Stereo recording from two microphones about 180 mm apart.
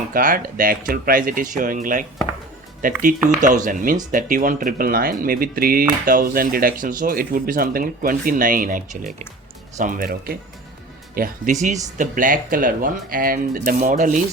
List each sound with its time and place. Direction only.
0.1 s speech: 50° right (ahead or behind)